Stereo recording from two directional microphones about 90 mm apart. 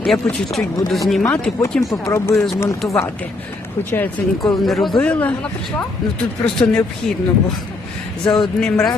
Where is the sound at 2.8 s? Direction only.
5° left (ahead or behind).